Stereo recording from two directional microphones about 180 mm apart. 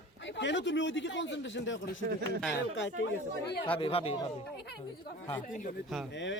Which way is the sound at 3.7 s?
30° left (ahead or behind).